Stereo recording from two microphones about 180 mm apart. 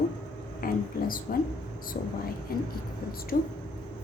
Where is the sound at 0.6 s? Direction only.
50° left (ahead or behind).